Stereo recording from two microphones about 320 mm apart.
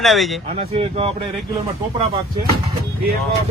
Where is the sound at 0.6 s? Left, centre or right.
Centre.